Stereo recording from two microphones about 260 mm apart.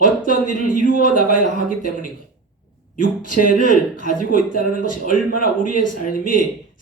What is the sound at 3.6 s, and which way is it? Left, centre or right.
Speech, left.